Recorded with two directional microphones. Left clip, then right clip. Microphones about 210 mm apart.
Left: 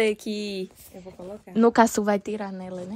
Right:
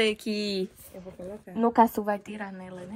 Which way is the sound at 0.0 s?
25° left (ahead or behind).